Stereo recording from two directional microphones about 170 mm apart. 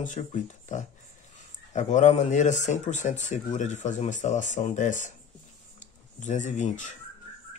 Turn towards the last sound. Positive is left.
turn(degrees=45)  # may be behind; listen again after turning